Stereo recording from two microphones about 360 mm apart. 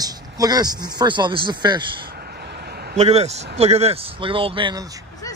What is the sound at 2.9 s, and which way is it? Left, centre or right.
A man's voice, centre.